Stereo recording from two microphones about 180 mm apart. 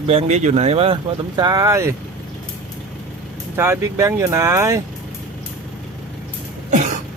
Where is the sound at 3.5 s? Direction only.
15° right (ahead or behind).